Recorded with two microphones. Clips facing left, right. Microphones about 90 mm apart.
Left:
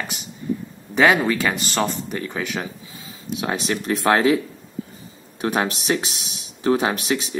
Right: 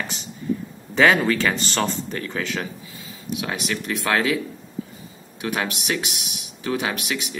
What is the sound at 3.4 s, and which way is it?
Speech, 30° left (ahead or behind).